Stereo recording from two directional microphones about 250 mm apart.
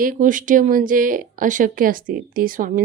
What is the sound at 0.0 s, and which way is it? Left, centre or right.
Speech, right.